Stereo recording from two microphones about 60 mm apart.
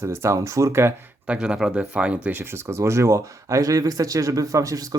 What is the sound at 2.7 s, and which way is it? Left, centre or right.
Speech, right.